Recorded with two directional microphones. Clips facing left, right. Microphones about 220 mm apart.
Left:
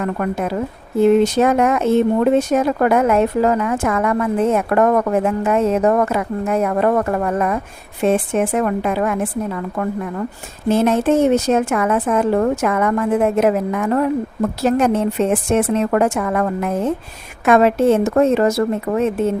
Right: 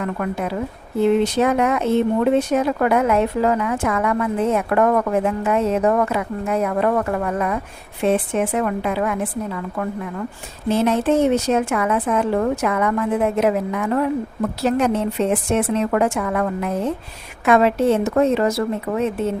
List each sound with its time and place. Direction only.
0.0 s speech: 45° left (ahead or behind)
10.7 s speech: 50° left (ahead or behind)